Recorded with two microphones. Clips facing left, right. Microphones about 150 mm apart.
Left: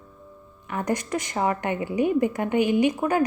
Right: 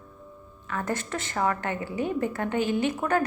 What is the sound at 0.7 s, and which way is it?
A woman's voice, 15° left (ahead or behind).